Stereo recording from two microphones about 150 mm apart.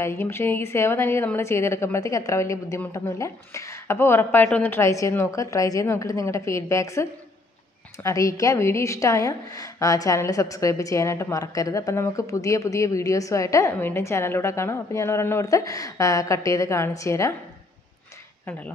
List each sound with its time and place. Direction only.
0.0 s a woman's voice: 15° left (ahead or behind)